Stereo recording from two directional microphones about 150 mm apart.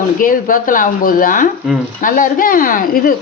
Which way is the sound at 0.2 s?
65° left (ahead or behind).